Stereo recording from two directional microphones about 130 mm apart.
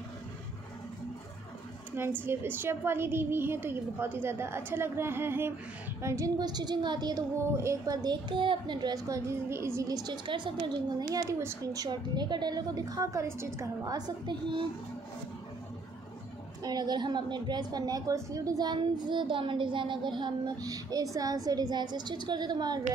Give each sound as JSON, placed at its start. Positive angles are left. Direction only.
{"t": 2.0, "sound": "a woman's voice", "side_deg": -15}
{"t": 16.6, "sound": "a woman's voice", "side_deg": -30}